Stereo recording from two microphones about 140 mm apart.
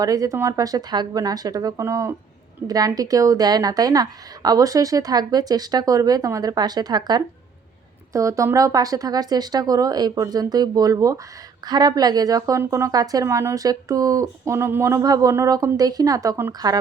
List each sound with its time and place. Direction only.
0.0 s speech: 25° right (ahead or behind)